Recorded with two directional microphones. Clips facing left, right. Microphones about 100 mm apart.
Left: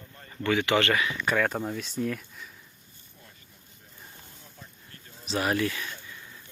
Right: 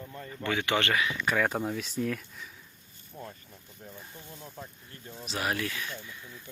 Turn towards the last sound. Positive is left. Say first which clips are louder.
# left 4 dB
turn(degrees=0)  # may be behind; listen again after turning